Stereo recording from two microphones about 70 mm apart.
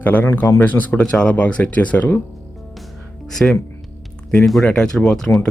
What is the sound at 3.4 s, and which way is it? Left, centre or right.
Speech, centre.